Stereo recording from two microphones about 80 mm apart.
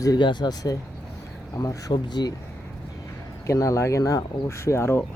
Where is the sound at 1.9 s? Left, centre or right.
Left.